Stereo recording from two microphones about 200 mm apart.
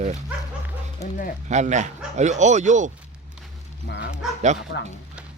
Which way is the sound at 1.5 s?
35° right (ahead or behind).